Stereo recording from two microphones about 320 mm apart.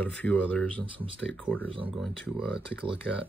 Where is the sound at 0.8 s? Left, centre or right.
Centre.